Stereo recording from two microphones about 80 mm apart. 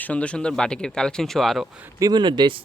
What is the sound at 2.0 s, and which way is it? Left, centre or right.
Speech, right.